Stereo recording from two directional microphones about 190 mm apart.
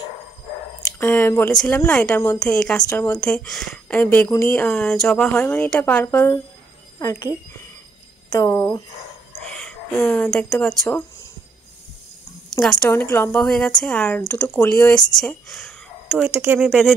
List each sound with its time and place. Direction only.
0.9 s speech: 10° left (ahead or behind)
8.3 s speech: 15° left (ahead or behind)
12.6 s speech: 10° left (ahead or behind)
16.3 s speech: 10° right (ahead or behind)